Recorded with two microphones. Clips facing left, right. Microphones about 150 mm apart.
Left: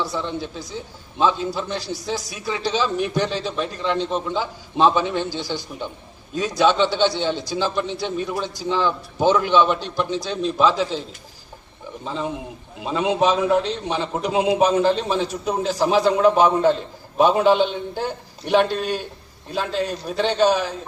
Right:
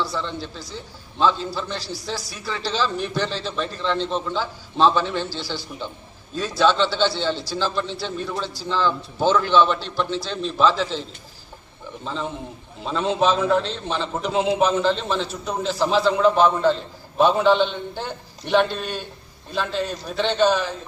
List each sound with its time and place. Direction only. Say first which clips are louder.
0.0 s a man's voice: left 1 dB; 20° left (ahead or behind)
12.0 s a man's voice: left 2 dB; 10° left (ahead or behind)